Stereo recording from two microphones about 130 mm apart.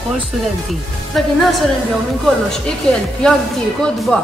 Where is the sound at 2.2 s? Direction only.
5° left (ahead or behind).